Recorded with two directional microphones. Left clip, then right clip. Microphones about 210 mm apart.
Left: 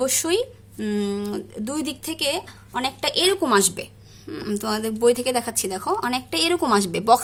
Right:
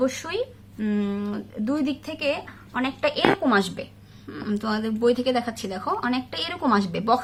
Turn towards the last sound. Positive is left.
turn(degrees=55)  # may be behind; listen again after turning